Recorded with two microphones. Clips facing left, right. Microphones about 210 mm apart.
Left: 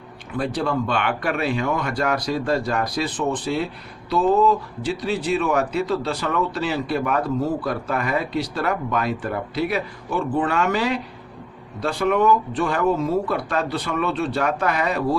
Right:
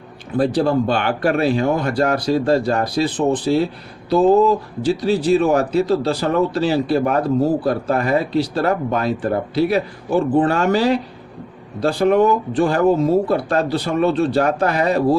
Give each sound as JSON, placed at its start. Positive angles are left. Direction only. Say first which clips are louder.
{"t": 0.3, "sound": "speech", "louder": "right 7 dB", "side_deg": -35}